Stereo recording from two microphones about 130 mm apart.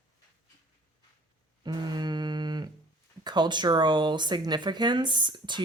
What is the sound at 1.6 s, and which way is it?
Speech, 35° right (ahead or behind).